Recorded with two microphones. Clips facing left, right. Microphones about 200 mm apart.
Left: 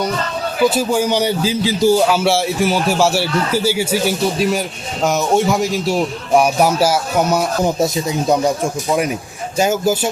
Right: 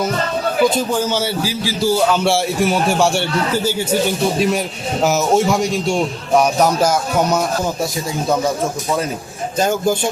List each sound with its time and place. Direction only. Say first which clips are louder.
0.7 s a man's voice: left 2 dB; 10° left (ahead or behind)
7.6 s speech: left 4 dB; 20° left (ahead or behind)
9.6 s speech: left 1 dB; 5° left (ahead or behind)